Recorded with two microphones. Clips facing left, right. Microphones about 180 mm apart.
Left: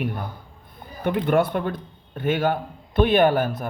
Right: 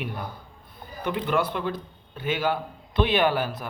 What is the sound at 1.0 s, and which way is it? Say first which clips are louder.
A man's voice: left 5 dB; 55° left (ahead or behind).